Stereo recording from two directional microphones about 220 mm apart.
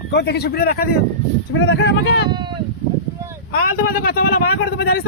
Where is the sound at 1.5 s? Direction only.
60° left (ahead or behind).